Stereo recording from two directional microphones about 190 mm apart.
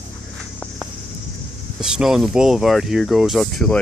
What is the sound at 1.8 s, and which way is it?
Speech, centre (ahead or behind).